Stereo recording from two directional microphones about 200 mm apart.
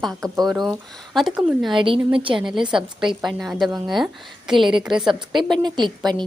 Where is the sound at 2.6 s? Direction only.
25° right (ahead or behind).